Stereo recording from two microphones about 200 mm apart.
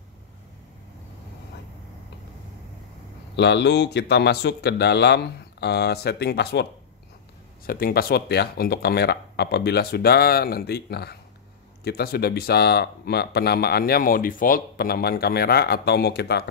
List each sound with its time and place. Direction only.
3.3 s speech: 60° left (ahead or behind)